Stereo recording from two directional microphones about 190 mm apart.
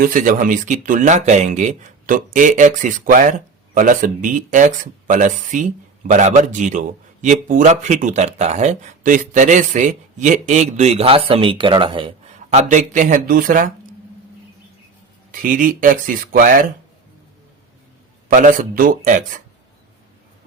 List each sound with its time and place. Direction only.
0.0 s speech: 45° right (ahead or behind); by 12.1 s 25° right (ahead or behind)
12.5 s speech: 40° right (ahead or behind)
15.3 s speech: 45° right (ahead or behind)
18.3 s speech: 45° right (ahead or behind)